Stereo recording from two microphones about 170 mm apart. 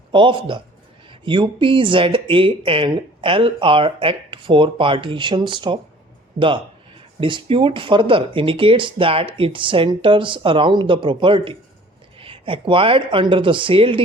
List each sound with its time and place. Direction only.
0.1 s speech: 30° right (ahead or behind)
7.2 s speech: 30° right (ahead or behind)